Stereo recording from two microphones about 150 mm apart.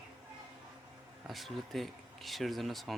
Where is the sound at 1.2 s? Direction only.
Centre (ahead or behind).